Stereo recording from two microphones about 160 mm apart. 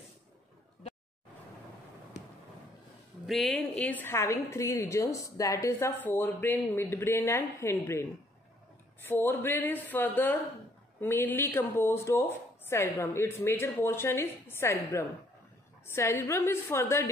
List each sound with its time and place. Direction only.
3.3 s speech: centre (ahead or behind); by 8.0 s 15° left (ahead or behind)
9.0 s speech: 15° left (ahead or behind)